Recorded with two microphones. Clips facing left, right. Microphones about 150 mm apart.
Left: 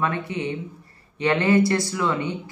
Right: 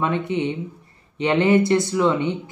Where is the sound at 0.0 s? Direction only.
20° right (ahead or behind).